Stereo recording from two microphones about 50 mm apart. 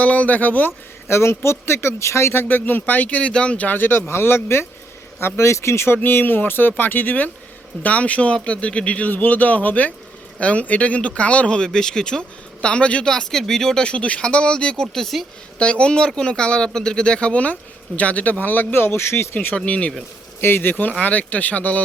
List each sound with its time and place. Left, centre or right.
0.0 s speech: left
1.0 s speech: left
3.7 s speech: left
5.2 s speech: left
6.0 s speech: left
9.0 s speech: left
13.1 s speech: centre
15.5 s speech: left
18.7 s speech: left
19.5 s speech: left
20.4 s speech: left